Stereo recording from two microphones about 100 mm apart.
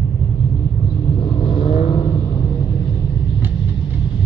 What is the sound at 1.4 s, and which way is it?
Vehicle, 55° left (ahead or behind).